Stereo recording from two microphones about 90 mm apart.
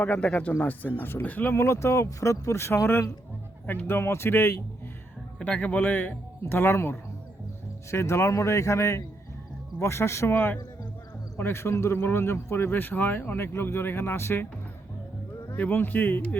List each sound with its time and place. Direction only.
0.0 s a man's voice: 15° left (ahead or behind)
5.4 s a man's voice: 15° left (ahead or behind)
15.4 s a man's voice: 25° left (ahead or behind)